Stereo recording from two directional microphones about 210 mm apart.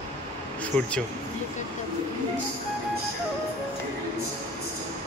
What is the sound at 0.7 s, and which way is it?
Speech, 10° left (ahead or behind).